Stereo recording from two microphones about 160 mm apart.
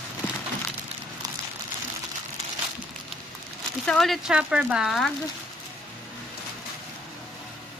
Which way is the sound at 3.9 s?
Centre (ahead or behind).